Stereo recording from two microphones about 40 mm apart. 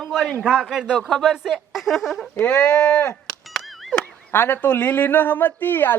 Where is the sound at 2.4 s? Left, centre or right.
Left.